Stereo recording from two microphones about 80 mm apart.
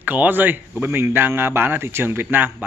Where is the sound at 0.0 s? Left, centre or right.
Right.